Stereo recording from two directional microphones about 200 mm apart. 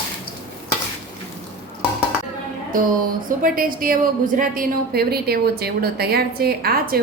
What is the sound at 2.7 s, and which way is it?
Music, 45° right (ahead or behind).